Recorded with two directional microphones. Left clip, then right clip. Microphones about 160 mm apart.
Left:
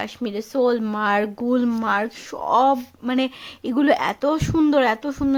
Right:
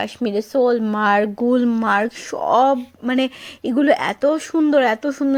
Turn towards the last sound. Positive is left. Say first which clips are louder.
# right 2 dB
turn(degrees=-20)  # may be behind; listen again after turning